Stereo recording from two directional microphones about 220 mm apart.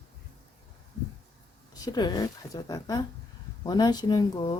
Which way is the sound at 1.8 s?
20° left (ahead or behind).